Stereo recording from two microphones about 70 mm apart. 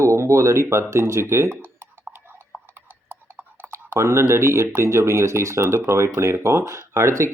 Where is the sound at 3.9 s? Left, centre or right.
Right.